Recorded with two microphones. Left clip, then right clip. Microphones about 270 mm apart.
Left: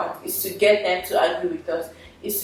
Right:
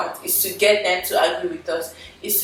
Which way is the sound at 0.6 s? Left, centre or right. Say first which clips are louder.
Right 1 dB; centre.